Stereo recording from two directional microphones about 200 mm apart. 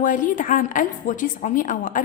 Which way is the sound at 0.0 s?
40° left (ahead or behind).